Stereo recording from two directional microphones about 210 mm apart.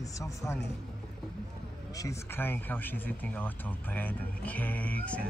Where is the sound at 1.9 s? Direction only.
15° left (ahead or behind).